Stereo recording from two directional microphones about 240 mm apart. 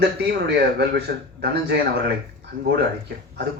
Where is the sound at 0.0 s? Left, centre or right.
Right.